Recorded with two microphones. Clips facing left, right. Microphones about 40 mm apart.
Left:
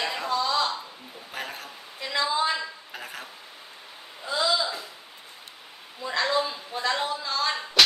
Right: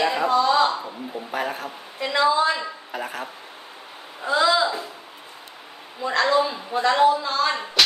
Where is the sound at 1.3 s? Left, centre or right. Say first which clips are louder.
Right 7 dB; centre.